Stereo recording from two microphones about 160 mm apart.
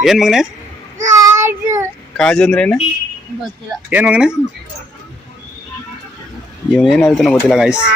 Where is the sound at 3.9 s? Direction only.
10° right (ahead or behind).